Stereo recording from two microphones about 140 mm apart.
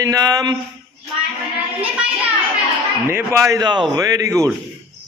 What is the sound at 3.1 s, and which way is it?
A man's voice, 20° right (ahead or behind).